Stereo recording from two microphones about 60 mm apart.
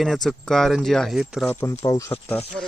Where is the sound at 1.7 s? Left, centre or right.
Left.